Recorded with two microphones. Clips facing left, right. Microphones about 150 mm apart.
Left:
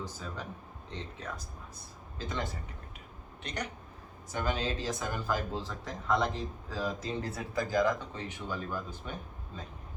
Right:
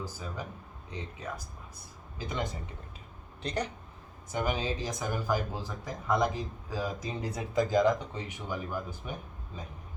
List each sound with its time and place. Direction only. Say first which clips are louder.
0.0 s speech: right 1 dB; 10° right (ahead or behind)
2.1 s speech: right 2 dB; 15° right (ahead or behind)
3.4 s speech: right 5 dB; 30° right (ahead or behind)
4.3 s speech: right 2 dB; 15° right (ahead or behind)